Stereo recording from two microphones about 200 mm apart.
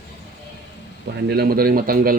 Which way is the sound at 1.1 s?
50° right (ahead or behind).